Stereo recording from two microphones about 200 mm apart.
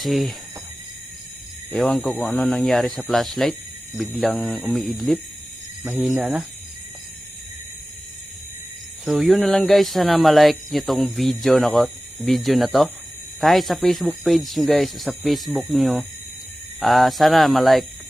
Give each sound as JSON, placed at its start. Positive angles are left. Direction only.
{"t": 0.0, "sound": "speech", "side_deg": 0}
{"t": 1.7, "sound": "speech", "side_deg": 0}
{"t": 9.0, "sound": "speech", "side_deg": 0}